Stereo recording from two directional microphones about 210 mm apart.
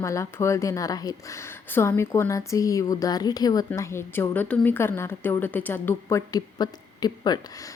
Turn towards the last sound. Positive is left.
turn(degrees=20)  # may be behind; listen again after turning